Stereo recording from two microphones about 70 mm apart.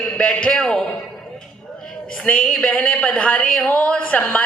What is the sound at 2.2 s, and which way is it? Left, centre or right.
Speech, centre.